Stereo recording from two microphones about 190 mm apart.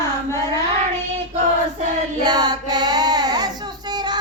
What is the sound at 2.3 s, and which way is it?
Child singing, 20° right (ahead or behind).